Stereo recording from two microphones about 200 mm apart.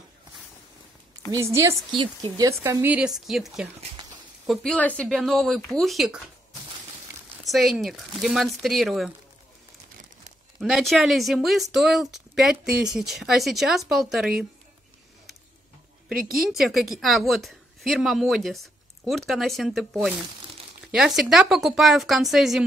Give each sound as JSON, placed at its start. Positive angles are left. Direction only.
{"t": 1.3, "sound": "a woman's voice", "side_deg": -15}
{"t": 7.4, "sound": "a woman's voice", "side_deg": 0}
{"t": 10.6, "sound": "a woman's voice", "side_deg": 0}
{"t": 16.1, "sound": "a woman's voice", "side_deg": 0}